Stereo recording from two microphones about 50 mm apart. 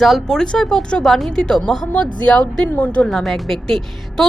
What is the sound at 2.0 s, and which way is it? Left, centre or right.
A woman's voice, left.